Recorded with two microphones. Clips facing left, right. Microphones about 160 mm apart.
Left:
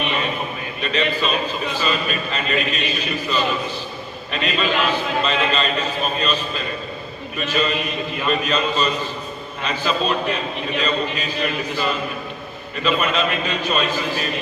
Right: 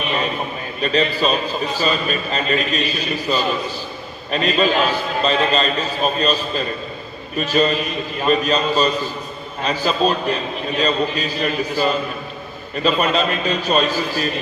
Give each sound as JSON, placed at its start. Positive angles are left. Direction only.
{"t": 0.8, "sound": "a man's voice", "side_deg": -40}
{"t": 7.3, "sound": "a man's voice", "side_deg": -40}